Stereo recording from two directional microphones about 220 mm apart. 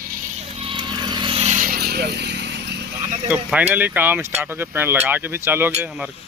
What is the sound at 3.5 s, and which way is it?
Speech, 5° right (ahead or behind).